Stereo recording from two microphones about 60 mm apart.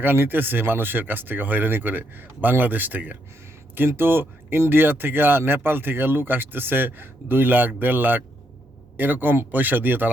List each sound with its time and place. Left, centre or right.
0.0 s speech: right